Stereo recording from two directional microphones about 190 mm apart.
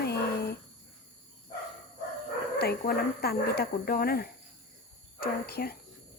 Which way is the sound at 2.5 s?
55° left (ahead or behind).